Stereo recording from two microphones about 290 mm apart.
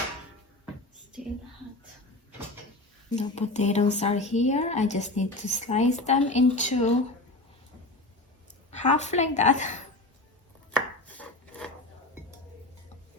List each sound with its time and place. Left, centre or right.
3.2 s speech: left
8.7 s speech: left
10.7 s chopping: centre